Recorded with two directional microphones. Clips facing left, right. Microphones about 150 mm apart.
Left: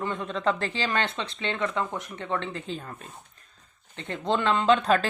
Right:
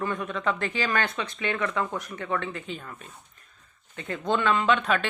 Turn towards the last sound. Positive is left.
turn(degrees=35)  # may be behind; listen again after turning